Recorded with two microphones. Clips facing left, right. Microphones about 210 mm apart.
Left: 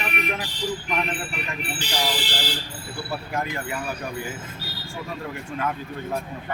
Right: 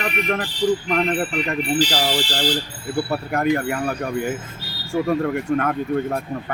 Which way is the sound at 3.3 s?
60° right (ahead or behind).